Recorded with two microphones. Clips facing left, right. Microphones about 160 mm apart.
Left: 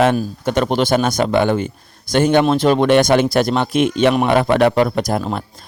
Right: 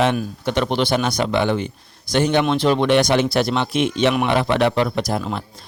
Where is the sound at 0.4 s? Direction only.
45° left (ahead or behind).